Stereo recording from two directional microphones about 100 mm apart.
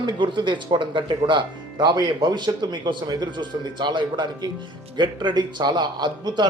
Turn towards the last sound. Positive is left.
turn(degrees=-45)  # may be behind; listen again after turning